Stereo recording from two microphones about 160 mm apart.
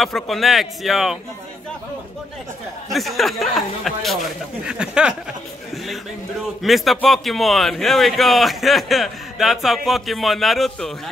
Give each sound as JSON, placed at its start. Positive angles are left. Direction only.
{"t": 0.0, "sound": "a man's voice", "side_deg": 0}
{"t": 2.9, "sound": "a man's voice", "side_deg": 0}
{"t": 6.6, "sound": "a man's voice", "side_deg": 0}